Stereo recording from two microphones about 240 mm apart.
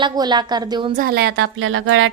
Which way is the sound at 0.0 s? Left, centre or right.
Centre.